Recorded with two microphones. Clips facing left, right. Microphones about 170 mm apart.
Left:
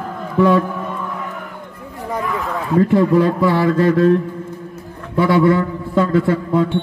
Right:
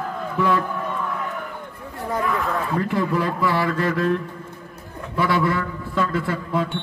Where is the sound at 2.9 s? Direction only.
30° left (ahead or behind).